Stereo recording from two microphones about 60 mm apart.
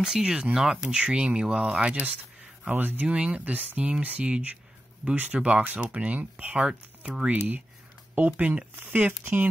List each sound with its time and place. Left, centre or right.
0.0 s speech: centre
2.7 s speech: right; by 7.1 s centre
7.2 s speech: right